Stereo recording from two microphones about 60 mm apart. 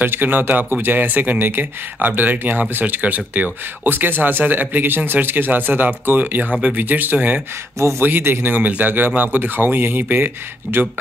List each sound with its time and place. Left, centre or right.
0.0 s speech: right